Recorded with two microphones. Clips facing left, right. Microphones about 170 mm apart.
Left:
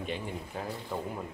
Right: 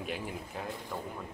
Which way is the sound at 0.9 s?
10° left (ahead or behind).